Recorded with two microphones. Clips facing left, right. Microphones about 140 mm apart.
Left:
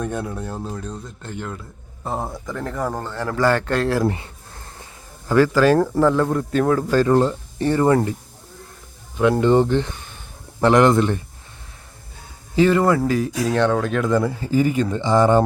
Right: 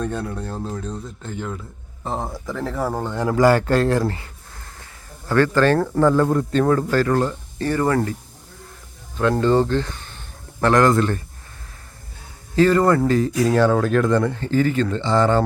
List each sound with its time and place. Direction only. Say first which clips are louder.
0.0 s speech: even; 10° left (ahead or behind)
4.0 s speech: left 3 dB; 20° left (ahead or behind)
5.3 s speech: left 2 dB; 10° left (ahead or behind)
6.9 s speech: left 3 dB; 20° left (ahead or behind)
9.1 s speech: left 2 dB; 15° left (ahead or behind)
10.9 s speech: left 1 dB; 15° left (ahead or behind)
12.5 s speech: right 1 dB; 10° left (ahead or behind)